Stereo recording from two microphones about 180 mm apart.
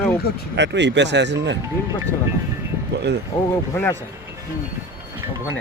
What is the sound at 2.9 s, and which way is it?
Speech, 70° right (ahead or behind).